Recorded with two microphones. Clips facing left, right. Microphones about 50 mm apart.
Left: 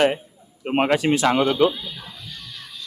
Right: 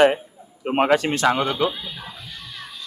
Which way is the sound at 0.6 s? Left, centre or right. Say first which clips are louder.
Right 1 dB; centre.